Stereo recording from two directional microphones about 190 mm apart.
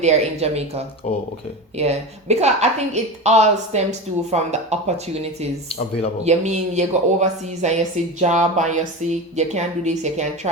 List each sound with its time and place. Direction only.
0.0 s a woman's voice: 35° right (ahead or behind)
1.0 s speech: 35° left (ahead or behind)
1.7 s a woman's voice: 35° right (ahead or behind)